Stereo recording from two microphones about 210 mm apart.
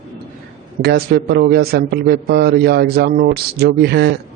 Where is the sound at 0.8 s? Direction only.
50° right (ahead or behind).